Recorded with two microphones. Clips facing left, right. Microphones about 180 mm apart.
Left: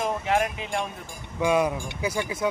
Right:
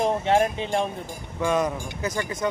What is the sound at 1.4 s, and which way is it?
Speech, 10° left (ahead or behind).